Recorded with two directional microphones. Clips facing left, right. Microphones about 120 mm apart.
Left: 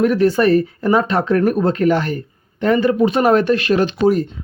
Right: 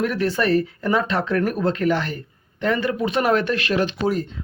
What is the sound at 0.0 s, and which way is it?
Speech, 40° left (ahead or behind).